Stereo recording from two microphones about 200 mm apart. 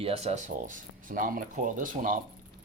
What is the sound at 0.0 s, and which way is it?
Speech, 30° right (ahead or behind).